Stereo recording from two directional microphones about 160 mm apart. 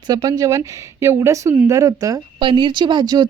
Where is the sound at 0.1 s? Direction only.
25° right (ahead or behind).